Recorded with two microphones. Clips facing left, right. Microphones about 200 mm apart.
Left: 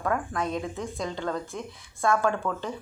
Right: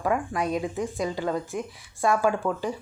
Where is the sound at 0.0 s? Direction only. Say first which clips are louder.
Right 2 dB; 15° right (ahead or behind).